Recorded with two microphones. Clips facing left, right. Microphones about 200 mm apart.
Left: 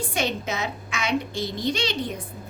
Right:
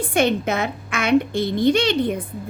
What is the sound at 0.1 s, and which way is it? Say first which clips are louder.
A woman's voice: right 11 dB; 55° right (ahead or behind).